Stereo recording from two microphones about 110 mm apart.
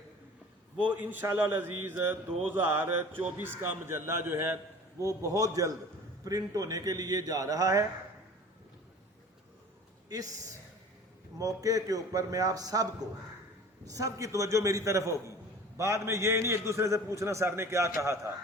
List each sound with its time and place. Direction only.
0.8 s a man's voice: 15° right (ahead or behind); by 7.9 s 30° right (ahead or behind)
10.1 s a man's voice: 35° right (ahead or behind)